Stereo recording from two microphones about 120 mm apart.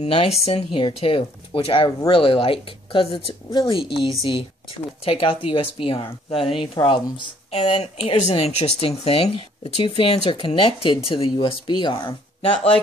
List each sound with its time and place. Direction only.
0.1 s speech: 50° left (ahead or behind)
0.7 s speech: 45° left (ahead or behind)